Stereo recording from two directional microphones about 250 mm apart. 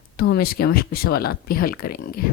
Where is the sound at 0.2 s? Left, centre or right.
Left.